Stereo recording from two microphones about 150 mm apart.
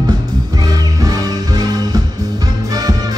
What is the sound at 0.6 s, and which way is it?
Music, 25° right (ahead or behind).